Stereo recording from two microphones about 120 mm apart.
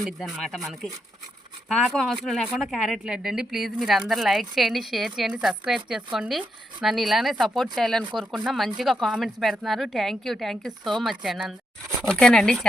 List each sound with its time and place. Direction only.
0.0 s speech: centre (ahead or behind)